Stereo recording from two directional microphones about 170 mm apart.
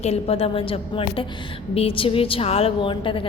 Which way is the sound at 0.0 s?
35° left (ahead or behind).